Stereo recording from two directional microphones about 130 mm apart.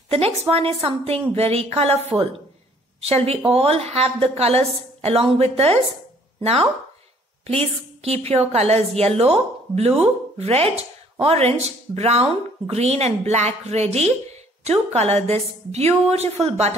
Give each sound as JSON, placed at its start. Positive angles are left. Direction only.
{"t": 0.1, "sound": "a woman's voice", "side_deg": -50}
{"t": 8.0, "sound": "a woman's voice", "side_deg": -50}